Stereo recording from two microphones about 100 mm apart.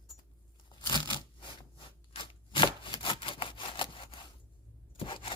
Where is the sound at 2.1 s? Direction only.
55° left (ahead or behind).